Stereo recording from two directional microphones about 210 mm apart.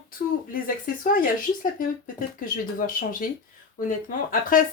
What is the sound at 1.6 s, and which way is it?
Speech, 40° left (ahead or behind).